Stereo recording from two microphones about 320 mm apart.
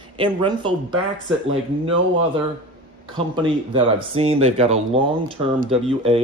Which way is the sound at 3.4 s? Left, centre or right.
Centre.